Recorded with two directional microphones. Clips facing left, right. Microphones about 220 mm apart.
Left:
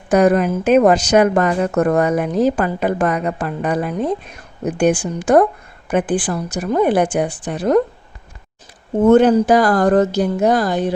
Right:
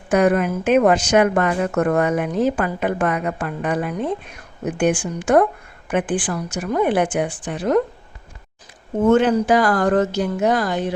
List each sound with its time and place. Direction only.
0.1 s speech: 40° left (ahead or behind)
9.0 s speech: 40° left (ahead or behind)